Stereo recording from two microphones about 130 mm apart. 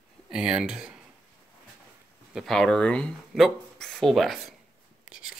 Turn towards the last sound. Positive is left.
turn(degrees=-5)  # may be behind; listen again after turning